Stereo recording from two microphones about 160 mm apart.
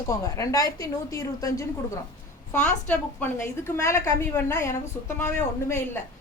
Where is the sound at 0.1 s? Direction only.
20° left (ahead or behind).